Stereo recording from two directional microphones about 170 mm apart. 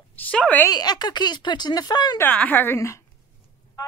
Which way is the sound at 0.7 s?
25° left (ahead or behind).